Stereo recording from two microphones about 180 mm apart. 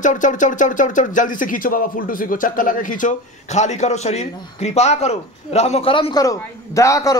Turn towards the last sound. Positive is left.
turn(degrees=20)  # may be behind; listen again after turning